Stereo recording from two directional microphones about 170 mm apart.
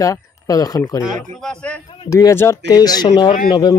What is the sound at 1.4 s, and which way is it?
Speech, 5° left (ahead or behind).